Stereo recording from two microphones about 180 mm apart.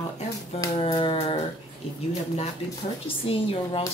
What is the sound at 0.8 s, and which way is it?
Speech, 30° left (ahead or behind).